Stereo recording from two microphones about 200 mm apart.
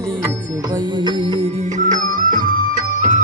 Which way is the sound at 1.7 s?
40° right (ahead or behind).